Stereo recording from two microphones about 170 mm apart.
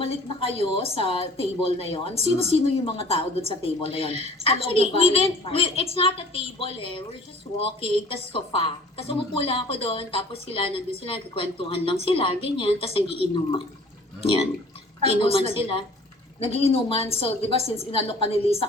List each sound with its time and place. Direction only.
0.0 s a woman's voice: 35° left (ahead or behind)
8.1 s a woman's voice: 35° left (ahead or behind)
15.0 s a woman's voice: 35° left (ahead or behind)